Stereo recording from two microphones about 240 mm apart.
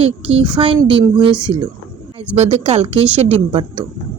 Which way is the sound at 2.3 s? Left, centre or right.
Right.